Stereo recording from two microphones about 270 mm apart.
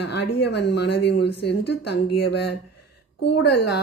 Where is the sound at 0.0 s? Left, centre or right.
Left.